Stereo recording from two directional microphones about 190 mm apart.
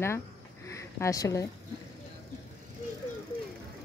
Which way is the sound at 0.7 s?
15° left (ahead or behind).